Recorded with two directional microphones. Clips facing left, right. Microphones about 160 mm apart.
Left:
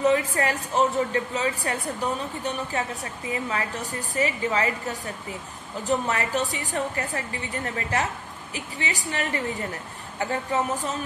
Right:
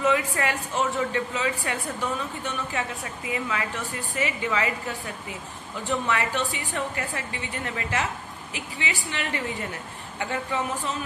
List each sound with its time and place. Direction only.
0.0 s a woman's voice: 40° left (ahead or behind)